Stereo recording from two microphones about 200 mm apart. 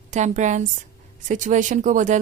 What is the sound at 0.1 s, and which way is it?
Speech, 35° right (ahead or behind).